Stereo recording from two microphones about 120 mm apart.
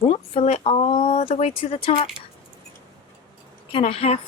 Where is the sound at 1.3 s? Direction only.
65° left (ahead or behind).